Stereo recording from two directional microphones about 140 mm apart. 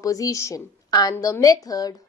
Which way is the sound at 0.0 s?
25° left (ahead or behind).